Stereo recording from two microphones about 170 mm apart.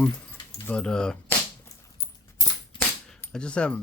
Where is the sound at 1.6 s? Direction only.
20° left (ahead or behind).